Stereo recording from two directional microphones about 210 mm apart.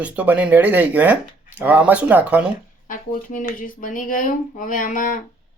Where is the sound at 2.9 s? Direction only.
40° left (ahead or behind).